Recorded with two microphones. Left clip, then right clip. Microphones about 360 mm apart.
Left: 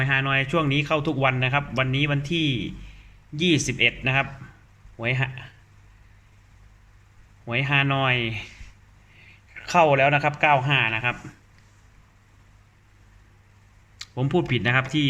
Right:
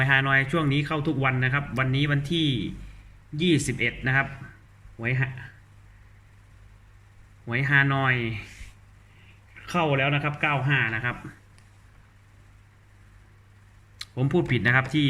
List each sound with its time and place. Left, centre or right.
0.0 s a man's voice: centre
7.4 s a man's voice: centre
9.6 s a man's voice: centre
14.0 s a man's voice: centre